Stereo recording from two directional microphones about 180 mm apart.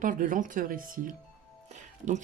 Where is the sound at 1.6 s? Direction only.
40° right (ahead or behind).